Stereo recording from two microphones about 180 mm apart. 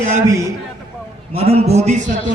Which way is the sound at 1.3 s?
35° right (ahead or behind).